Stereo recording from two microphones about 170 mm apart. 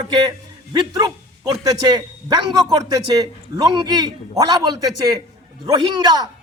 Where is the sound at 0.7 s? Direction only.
25° right (ahead or behind).